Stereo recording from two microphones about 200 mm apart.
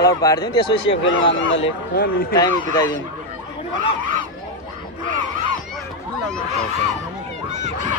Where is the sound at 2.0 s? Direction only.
50° left (ahead or behind).